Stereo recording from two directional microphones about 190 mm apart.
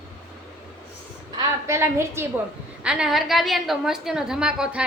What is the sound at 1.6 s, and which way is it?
A woman's voice, 15° right (ahead or behind).